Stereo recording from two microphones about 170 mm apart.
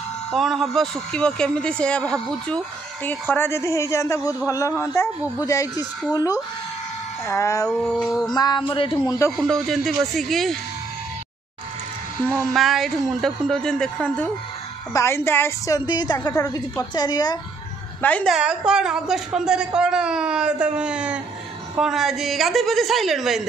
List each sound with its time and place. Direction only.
0.3 s a man's voice: centre (ahead or behind); by 7.6 s 15° left (ahead or behind)
7.6 s a man's voice: 5° left (ahead or behind)
8.4 s a woman's voice: 25° left (ahead or behind)
9.4 s a man's voice: centre (ahead or behind)
12.5 s a man's voice: centre (ahead or behind)
14.9 s a woman's voice: 15° left (ahead or behind)
18.0 s speech: 10° left (ahead or behind)
18.3 s a man's voice: 5° right (ahead or behind)